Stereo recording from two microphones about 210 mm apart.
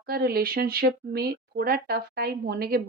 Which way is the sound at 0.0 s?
45° right (ahead or behind).